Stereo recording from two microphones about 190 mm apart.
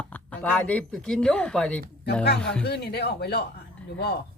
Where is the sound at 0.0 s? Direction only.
10° left (ahead or behind).